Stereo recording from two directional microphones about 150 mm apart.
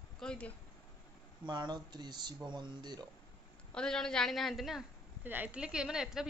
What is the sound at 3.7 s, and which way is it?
A woman's voice, 5° left (ahead or behind).